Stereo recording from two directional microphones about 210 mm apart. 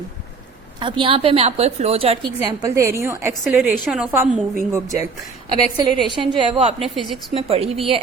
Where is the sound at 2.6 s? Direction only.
15° right (ahead or behind).